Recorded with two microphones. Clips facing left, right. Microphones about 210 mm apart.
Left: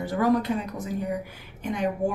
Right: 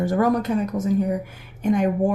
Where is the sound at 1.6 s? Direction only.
50° right (ahead or behind).